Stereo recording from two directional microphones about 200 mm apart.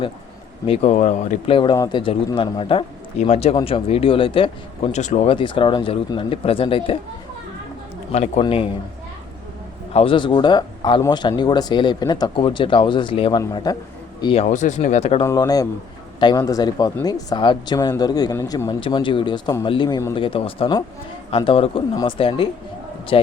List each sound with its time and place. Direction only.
0.6 s speech: 30° left (ahead or behind)
8.1 s speech: 30° left (ahead or behind)
9.9 s speech: 30° left (ahead or behind)
14.5 s speech: 35° left (ahead or behind)
15.2 s speech: 15° left (ahead or behind)